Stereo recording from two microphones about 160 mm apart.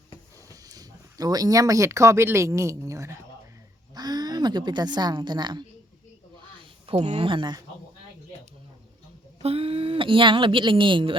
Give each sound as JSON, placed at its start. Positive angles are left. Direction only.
{"t": 0.4, "sound": "a woman's voice", "side_deg": -20}
{"t": 6.8, "sound": "speech", "side_deg": -30}
{"t": 9.4, "sound": "speech", "side_deg": -35}